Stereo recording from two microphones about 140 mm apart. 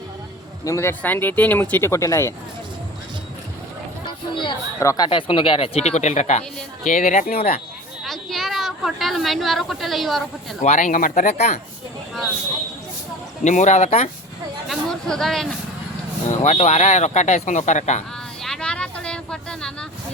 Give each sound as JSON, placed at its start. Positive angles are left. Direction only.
{"t": 0.6, "sound": "speech", "side_deg": 20}
{"t": 4.0, "sound": "a sound", "side_deg": 35}
{"t": 4.8, "sound": "speech", "side_deg": 20}
{"t": 5.0, "sound": "speech", "side_deg": 40}
{"t": 6.8, "sound": "speech", "side_deg": 70}
{"t": 8.0, "sound": "a woman's voice", "side_deg": 0}
{"t": 10.6, "sound": "speech", "side_deg": 60}
{"t": 13.4, "sound": "speech", "side_deg": 60}
{"t": 14.7, "sound": "a sound", "side_deg": 5}
{"t": 16.3, "sound": "speech", "side_deg": 55}
{"t": 18.4, "sound": "a sound", "side_deg": 5}